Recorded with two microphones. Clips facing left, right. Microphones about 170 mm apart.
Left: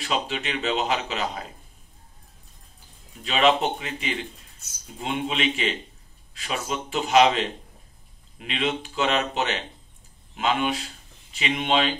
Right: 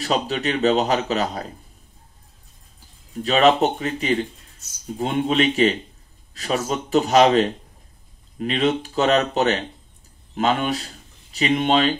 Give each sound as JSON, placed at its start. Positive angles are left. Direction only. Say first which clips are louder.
{"t": 0.0, "sound": "speech", "louder": "right 5 dB", "side_deg": -40}
{"t": 3.3, "sound": "speech", "louder": "right 4 dB", "side_deg": -40}